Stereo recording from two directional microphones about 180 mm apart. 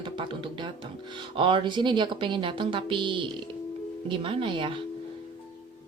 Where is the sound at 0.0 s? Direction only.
25° right (ahead or behind).